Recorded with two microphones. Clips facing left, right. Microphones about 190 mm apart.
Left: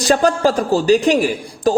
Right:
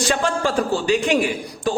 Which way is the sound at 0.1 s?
40° left (ahead or behind).